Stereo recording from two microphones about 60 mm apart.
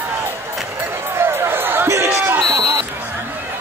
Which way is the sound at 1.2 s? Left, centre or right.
Right.